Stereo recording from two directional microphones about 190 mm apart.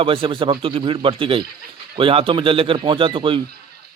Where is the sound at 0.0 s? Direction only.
25° right (ahead or behind).